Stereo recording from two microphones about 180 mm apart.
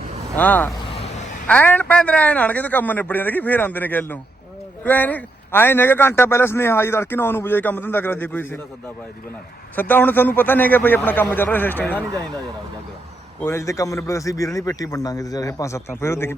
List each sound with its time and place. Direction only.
0.3 s a man's voice: 10° left (ahead or behind)
0.9 s vehicle: 30° left (ahead or behind)
1.5 s a man's voice: 10° left (ahead or behind)
9.7 s a man's voice: 10° left (ahead or behind)
13.4 s a man's voice: 15° left (ahead or behind)